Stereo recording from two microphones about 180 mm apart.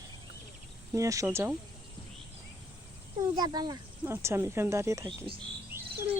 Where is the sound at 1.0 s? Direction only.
15° right (ahead or behind).